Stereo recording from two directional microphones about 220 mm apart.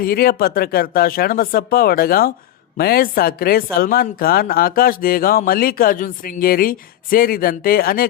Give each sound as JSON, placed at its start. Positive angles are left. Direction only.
{"t": 0.0, "sound": "a woman's voice", "side_deg": 40}